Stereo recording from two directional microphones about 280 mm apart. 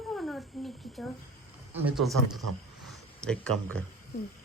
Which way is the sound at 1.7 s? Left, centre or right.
Centre.